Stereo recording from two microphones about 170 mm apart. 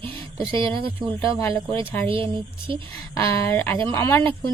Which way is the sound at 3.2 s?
15° left (ahead or behind).